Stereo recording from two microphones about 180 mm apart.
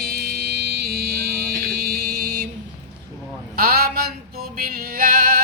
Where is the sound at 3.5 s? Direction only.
55° right (ahead or behind).